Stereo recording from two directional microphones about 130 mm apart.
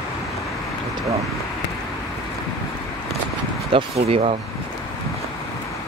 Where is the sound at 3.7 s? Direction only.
50° right (ahead or behind).